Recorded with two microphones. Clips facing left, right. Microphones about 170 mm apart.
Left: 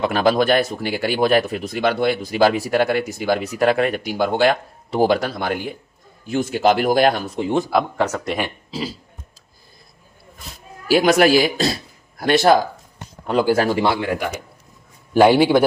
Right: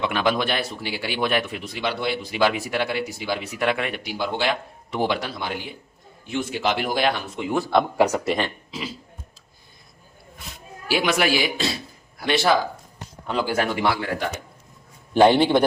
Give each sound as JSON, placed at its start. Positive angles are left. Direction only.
{"t": 0.0, "sound": "speech", "side_deg": 40}
{"t": 7.9, "sound": "speech", "side_deg": -10}
{"t": 8.7, "sound": "a sound", "side_deg": 35}
{"t": 10.8, "sound": "a man's voice", "side_deg": 40}